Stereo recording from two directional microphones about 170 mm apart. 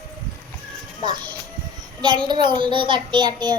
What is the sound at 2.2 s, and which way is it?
A child's voice, 25° right (ahead or behind).